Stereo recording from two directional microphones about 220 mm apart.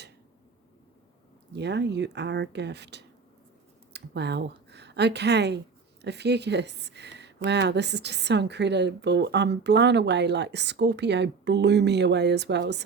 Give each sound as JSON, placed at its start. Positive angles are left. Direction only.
{"t": 1.5, "sound": "speech", "side_deg": -50}